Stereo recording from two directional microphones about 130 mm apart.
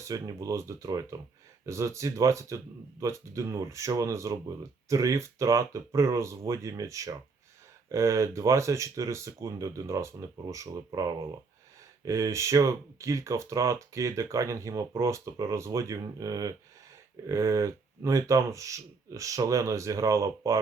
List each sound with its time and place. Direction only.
0.0 s speech: 25° right (ahead or behind)